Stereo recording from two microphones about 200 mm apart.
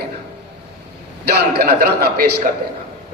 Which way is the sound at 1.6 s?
50° right (ahead or behind).